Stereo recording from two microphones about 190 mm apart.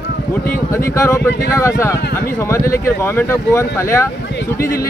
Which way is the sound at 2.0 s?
55° left (ahead or behind).